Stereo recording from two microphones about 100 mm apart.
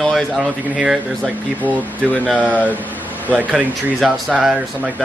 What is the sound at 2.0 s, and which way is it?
Speech, 15° left (ahead or behind).